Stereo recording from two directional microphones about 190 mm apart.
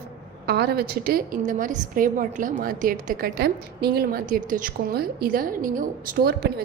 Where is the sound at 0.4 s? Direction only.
55° right (ahead or behind).